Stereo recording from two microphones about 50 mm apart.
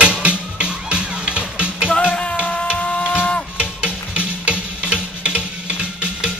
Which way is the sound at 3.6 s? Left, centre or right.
Right.